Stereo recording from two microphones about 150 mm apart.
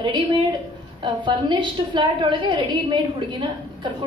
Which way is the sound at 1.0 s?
30° right (ahead or behind).